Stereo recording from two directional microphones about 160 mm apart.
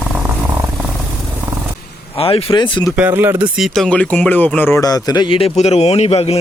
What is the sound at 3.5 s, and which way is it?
Speech, centre (ahead or behind).